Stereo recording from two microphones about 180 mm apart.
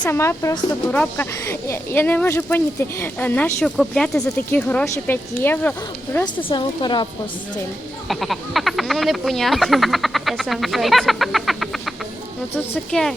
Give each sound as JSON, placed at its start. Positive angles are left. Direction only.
{"t": 0.0, "sound": "speech", "side_deg": 15}
{"t": 6.2, "sound": "speech", "side_deg": 25}
{"t": 8.0, "sound": "speech", "side_deg": 0}